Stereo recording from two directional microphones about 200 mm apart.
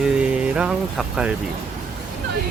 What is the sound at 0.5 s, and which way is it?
Speech, 5° right (ahead or behind).